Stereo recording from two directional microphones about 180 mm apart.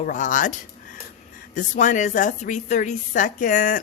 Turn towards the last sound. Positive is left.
turn(degrees=50)  # may be behind; listen again after turning